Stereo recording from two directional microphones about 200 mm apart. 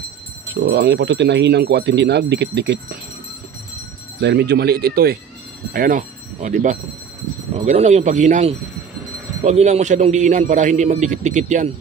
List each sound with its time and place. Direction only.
0.5 s speech: 60° right (ahead or behind)
4.2 s a man's voice: 60° right (ahead or behind); by 11.7 s 35° right (ahead or behind)